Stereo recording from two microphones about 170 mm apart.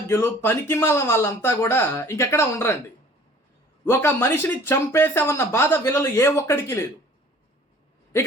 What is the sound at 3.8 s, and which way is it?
Speech, 15° left (ahead or behind).